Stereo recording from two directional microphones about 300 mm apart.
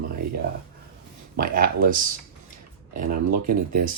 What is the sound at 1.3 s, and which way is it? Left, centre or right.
Speech, right.